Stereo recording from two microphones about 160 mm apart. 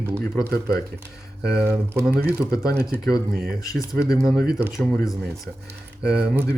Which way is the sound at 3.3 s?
Centre (ahead or behind).